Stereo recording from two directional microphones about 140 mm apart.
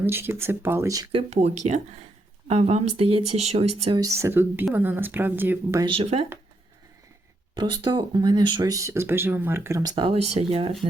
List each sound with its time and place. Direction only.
0.0 s speech: 15° right (ahead or behind)
1.1 s speech: 50° right (ahead or behind)
3.9 s speech: 25° right (ahead or behind)
5.8 s speech: 40° right (ahead or behind)
7.5 s speech: 30° right (ahead or behind)
9.9 s speech: 40° right (ahead or behind)